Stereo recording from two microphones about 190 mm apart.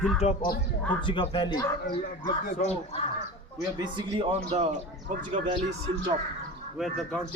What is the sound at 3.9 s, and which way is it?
Speech, 30° right (ahead or behind).